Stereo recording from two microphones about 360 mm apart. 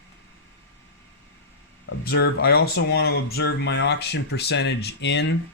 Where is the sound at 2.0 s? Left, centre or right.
Left.